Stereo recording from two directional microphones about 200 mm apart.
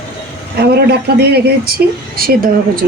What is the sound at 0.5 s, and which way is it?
Speech, 55° right (ahead or behind).